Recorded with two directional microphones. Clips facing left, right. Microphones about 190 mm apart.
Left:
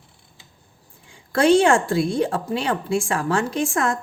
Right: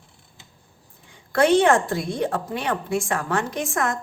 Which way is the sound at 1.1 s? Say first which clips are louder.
Left 2 dB; 30° left (ahead or behind).